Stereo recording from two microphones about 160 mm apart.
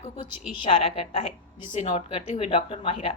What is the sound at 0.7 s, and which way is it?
A woman's voice, 35° left (ahead or behind).